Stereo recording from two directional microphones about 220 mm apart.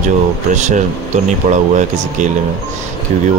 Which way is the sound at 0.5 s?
35° right (ahead or behind).